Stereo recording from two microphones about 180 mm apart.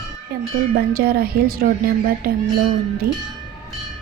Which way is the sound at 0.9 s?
55° right (ahead or behind).